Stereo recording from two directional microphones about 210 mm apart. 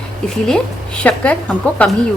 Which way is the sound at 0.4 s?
5° left (ahead or behind).